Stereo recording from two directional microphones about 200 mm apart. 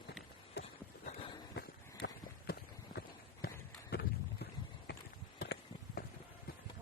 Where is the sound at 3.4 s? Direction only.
50° left (ahead or behind).